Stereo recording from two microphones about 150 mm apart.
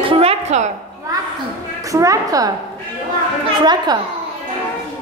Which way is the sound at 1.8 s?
20° right (ahead or behind).